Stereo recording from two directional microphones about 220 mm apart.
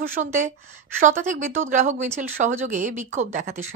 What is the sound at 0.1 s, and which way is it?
Speech, 35° right (ahead or behind).